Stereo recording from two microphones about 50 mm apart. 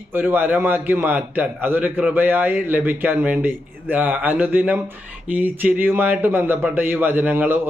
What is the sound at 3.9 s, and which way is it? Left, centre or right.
A man's voice, right.